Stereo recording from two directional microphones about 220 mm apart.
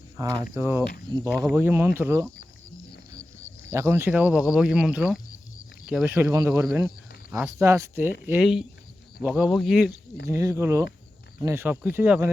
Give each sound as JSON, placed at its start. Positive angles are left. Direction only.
{"t": 0.2, "sound": "speech", "side_deg": -15}
{"t": 3.7, "sound": "speech", "side_deg": -10}
{"t": 6.1, "sound": "speech", "side_deg": -15}
{"t": 10.2, "sound": "speech", "side_deg": -15}